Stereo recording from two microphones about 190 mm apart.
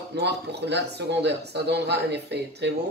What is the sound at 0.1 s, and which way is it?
Speech, 60° right (ahead or behind).